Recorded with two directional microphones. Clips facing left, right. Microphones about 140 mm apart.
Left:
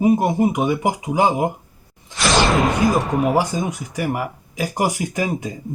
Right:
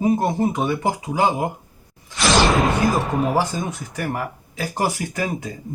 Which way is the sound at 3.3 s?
15° left (ahead or behind).